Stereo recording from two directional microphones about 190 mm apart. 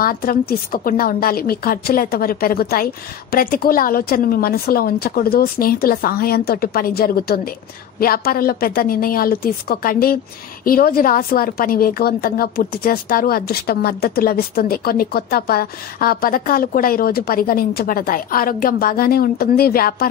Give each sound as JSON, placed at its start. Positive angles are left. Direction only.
{"t": 0.0, "sound": "a woman's voice", "side_deg": 50}